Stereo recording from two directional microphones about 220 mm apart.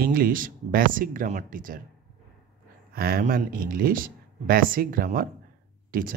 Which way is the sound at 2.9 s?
45° right (ahead or behind).